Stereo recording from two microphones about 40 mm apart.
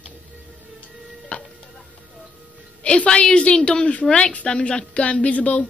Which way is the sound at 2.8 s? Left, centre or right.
Left.